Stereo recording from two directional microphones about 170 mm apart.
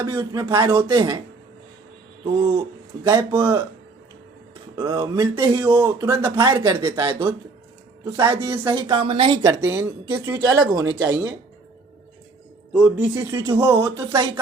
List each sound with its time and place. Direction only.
0.0 s speech: 20° right (ahead or behind)
3.0 s speech: 15° right (ahead or behind)
4.8 s speech: 25° right (ahead or behind)
13.1 s speech: 20° right (ahead or behind)